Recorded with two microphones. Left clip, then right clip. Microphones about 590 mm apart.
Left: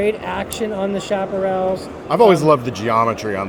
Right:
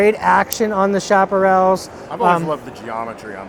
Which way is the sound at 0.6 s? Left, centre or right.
Right.